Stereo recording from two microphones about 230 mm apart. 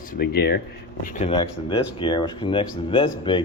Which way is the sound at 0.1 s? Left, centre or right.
Left.